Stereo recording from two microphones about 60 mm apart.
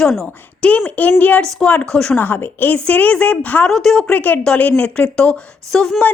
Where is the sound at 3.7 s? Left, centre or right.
Centre.